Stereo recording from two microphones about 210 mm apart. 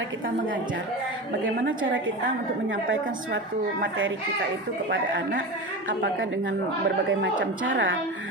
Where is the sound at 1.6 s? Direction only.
65° right (ahead or behind).